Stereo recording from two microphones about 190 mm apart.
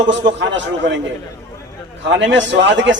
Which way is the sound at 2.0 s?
70° right (ahead or behind).